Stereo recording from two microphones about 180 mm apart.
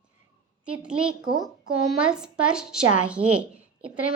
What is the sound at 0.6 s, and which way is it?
Speech, 5° right (ahead or behind).